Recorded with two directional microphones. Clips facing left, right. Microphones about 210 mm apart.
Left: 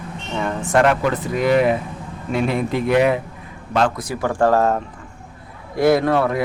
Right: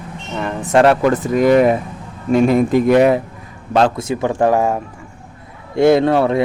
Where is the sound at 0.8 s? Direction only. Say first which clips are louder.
Right 5 dB; 40° right (ahead or behind).